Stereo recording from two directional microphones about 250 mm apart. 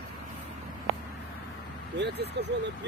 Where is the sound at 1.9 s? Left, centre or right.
Right.